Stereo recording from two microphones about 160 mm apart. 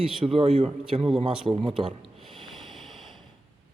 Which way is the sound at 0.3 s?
40° right (ahead or behind).